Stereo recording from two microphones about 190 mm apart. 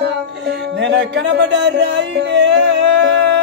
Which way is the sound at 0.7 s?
65° right (ahead or behind).